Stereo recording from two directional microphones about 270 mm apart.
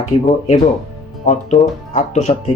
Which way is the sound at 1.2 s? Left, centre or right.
Left.